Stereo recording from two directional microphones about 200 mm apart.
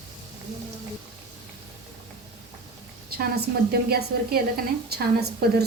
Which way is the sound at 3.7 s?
50° right (ahead or behind).